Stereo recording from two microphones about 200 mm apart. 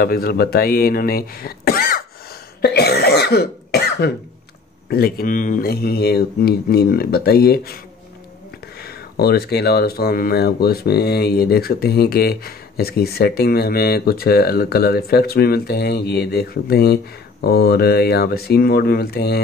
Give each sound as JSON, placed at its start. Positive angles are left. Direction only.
{"t": 0.0, "sound": "speech", "side_deg": 50}
{"t": 2.6, "sound": "cough", "side_deg": 55}
{"t": 4.8, "sound": "speech", "side_deg": 50}
{"t": 8.8, "sound": "speech", "side_deg": 50}